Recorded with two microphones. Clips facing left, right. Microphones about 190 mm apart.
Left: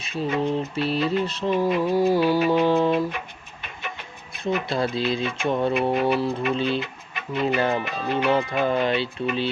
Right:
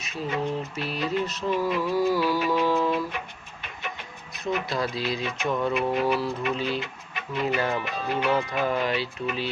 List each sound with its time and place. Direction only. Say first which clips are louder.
0.0 s speech: left 4 dB; 30° left (ahead or behind)
4.4 s speech: left 3 dB; 25° left (ahead or behind)